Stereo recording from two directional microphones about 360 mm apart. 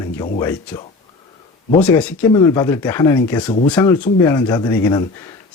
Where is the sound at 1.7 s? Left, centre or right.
Centre.